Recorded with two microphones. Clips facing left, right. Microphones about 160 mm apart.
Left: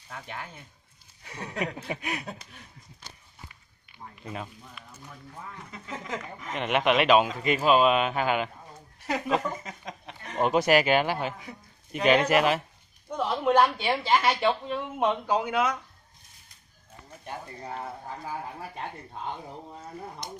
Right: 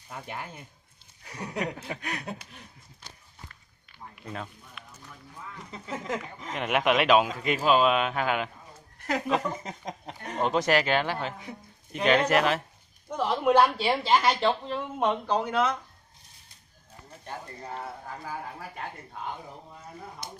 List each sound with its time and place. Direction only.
0.1 s speech: 15° right (ahead or behind)
1.3 s a sound: 10° right (ahead or behind)
1.8 s a man's voice: 10° left (ahead or behind)
4.2 s a man's voice: 10° left (ahead or behind)
5.9 s a sound: 10° right (ahead or behind)
6.5 s a woman's voice: 5° right (ahead or behind)
9.6 s speech: 35° right (ahead or behind)
10.4 s a man's voice: 10° left (ahead or behind)